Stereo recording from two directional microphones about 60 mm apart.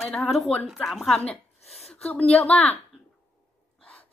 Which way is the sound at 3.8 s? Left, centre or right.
Left.